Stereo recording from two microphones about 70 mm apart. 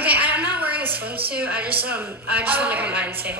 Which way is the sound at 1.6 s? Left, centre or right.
Right.